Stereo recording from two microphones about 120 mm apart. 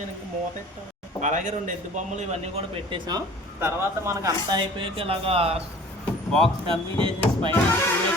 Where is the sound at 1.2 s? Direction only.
90° right; by 3.0 s 55° right (ahead or behind).